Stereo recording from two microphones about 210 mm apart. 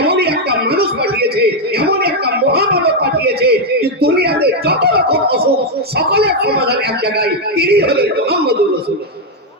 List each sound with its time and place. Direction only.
0.0 s music: 50° right (ahead or behind)
6.0 s a man's voice: 50° right (ahead or behind)